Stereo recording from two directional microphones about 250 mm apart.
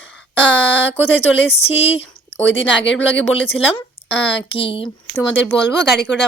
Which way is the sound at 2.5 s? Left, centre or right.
Left.